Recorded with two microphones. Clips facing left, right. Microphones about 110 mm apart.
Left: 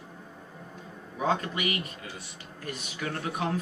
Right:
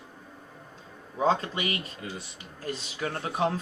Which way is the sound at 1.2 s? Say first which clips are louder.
Right 2 dB; 30° right (ahead or behind).